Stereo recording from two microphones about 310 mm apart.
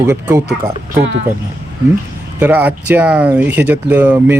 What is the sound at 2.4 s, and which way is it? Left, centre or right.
Speech, centre.